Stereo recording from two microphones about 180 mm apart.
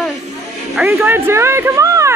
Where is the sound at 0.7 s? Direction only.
10° right (ahead or behind).